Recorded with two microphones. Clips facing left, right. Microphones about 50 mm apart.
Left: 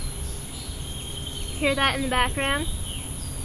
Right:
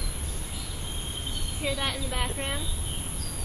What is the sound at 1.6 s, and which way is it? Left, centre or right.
Speech, left.